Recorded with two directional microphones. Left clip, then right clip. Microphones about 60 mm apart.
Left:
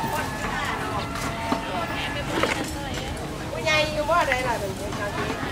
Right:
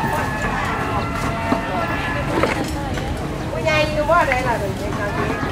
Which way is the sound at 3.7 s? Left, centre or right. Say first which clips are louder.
Right 5 dB; left.